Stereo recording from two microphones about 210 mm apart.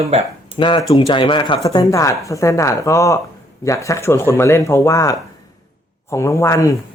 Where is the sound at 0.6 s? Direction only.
25° left (ahead or behind).